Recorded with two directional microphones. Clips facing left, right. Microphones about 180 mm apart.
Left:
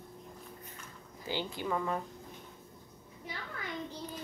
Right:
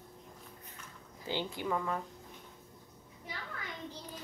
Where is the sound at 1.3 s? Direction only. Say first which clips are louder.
Even; 15° right (ahead or behind).